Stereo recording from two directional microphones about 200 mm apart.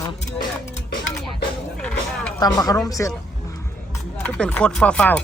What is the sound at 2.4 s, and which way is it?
Speech, 20° left (ahead or behind).